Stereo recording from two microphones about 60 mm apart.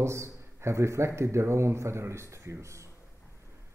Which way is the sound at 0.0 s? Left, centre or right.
Right.